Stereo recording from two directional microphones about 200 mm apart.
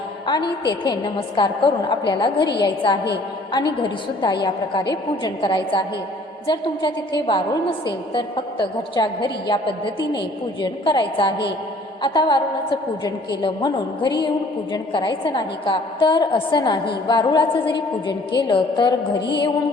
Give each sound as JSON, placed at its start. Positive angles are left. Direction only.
{"t": 0.3, "sound": "a woman's voice", "side_deg": 20}